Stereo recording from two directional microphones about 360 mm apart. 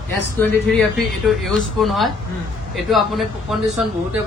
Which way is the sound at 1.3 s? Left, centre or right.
Centre.